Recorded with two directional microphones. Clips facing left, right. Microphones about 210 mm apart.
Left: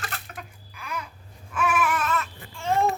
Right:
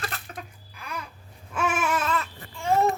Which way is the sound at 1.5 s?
30° right (ahead or behind).